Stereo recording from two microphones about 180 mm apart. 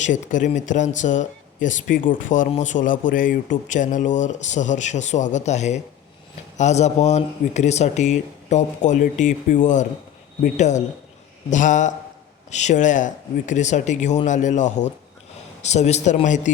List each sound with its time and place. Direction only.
0.0 s a man's voice: 45° left (ahead or behind)